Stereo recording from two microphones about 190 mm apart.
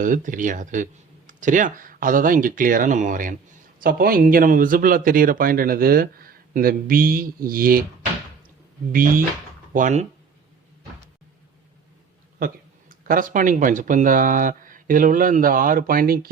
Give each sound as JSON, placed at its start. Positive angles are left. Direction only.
{"t": 0.0, "sound": "speech", "side_deg": -45}
{"t": 8.9, "sound": "speech", "side_deg": -50}
{"t": 12.9, "sound": "speech", "side_deg": -45}